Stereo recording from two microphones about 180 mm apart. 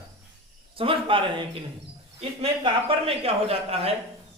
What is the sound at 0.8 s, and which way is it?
Speech, 30° right (ahead or behind).